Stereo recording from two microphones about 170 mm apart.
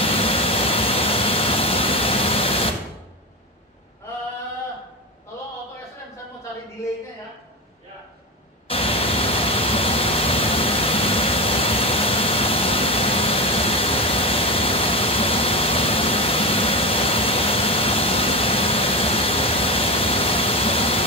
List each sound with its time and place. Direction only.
0.0 s vehicle: 35° left (ahead or behind)
8.6 s vehicle: 35° left (ahead or behind)